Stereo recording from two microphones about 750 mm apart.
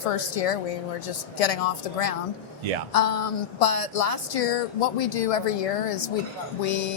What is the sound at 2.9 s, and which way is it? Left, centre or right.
A woman's voice, left.